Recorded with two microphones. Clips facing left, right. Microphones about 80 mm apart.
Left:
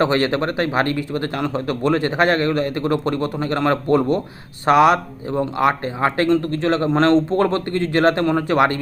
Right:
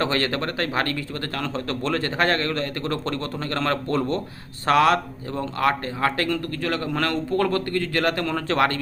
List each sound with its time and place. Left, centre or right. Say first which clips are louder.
0.0 s speech: left 6 dB; left